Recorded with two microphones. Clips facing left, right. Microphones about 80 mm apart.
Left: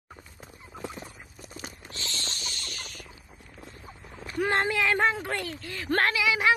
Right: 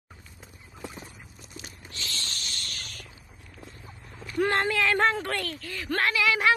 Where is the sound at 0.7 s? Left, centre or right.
Left.